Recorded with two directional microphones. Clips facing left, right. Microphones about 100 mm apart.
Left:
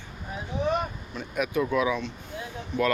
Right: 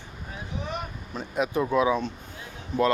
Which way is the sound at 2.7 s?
40° right (ahead or behind).